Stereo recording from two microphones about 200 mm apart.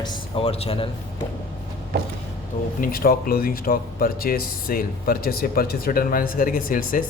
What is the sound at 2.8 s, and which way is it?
Speech, 50° left (ahead or behind).